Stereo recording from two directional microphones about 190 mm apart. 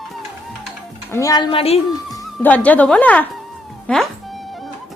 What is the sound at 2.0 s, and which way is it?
Speech, 5° left (ahead or behind).